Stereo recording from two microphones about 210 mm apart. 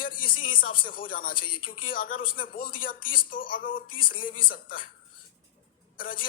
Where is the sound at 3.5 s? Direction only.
40° left (ahead or behind).